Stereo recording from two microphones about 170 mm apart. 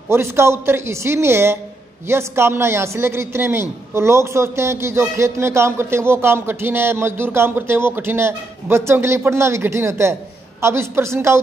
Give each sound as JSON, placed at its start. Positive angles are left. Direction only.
{"t": 0.1, "sound": "a man's voice", "side_deg": -15}